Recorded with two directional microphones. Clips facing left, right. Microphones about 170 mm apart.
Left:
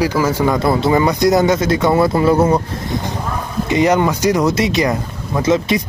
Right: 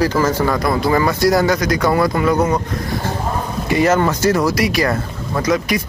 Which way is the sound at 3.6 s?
20° left (ahead or behind).